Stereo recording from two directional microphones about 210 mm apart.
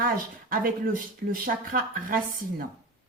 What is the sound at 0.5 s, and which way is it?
Speech, 40° right (ahead or behind).